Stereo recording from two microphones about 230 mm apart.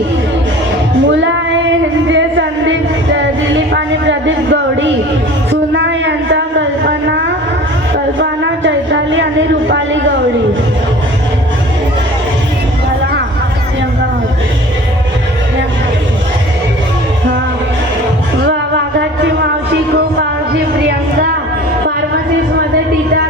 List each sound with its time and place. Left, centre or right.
1.0 s female singing: right
2.0 s a sound: right
18.9 s music: right